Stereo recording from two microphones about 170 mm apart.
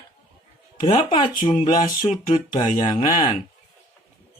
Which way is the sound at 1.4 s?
45° left (ahead or behind).